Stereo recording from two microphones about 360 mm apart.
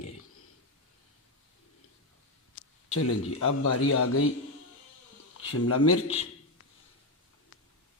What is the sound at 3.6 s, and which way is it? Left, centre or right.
Speech, left.